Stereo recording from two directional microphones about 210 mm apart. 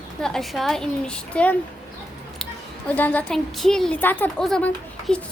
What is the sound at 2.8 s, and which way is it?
A woman's voice, 10° left (ahead or behind).